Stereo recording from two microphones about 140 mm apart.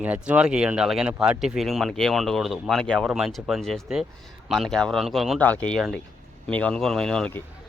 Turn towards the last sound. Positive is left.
turn(degrees=5)  # may be behind; listen again after turning